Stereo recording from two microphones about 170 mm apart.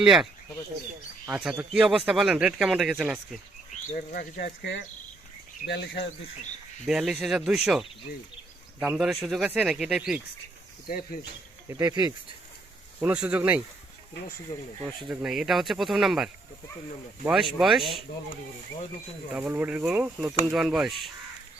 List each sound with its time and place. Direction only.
0.0 s speech: centre (ahead or behind)
1.3 s speech: 5° right (ahead or behind)
3.9 s speech: 60° left (ahead or behind); by 6.1 s 90° left
6.8 s speech: 5° right (ahead or behind)
10.8 s speech: 55° left (ahead or behind)
11.7 s speech: 20° right (ahead or behind)
13.0 s speech: 10° right (ahead or behind)
15.1 s speech: 5° right (ahead or behind)
19.3 s speech: 10° right (ahead or behind)